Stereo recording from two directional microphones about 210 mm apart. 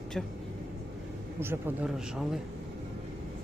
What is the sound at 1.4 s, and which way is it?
Speech, 10° right (ahead or behind).